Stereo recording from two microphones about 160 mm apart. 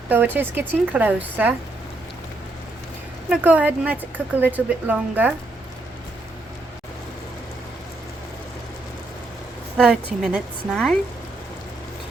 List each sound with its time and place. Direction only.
0.1 s a woman's voice: 10° right (ahead or behind)
3.2 s a woman's voice: 10° right (ahead or behind)
9.7 s a woman's voice: 5° right (ahead or behind)